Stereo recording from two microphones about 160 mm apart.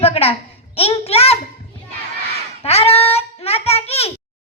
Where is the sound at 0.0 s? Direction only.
40° left (ahead or behind).